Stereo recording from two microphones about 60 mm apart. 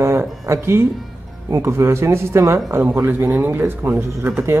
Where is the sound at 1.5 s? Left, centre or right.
Right.